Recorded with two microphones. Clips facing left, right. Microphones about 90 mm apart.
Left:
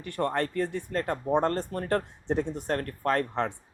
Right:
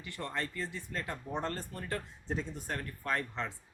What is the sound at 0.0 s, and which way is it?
Speech, 55° left (ahead or behind).